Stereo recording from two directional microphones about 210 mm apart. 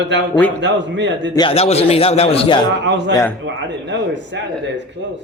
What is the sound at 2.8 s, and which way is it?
Speech, 60° right (ahead or behind).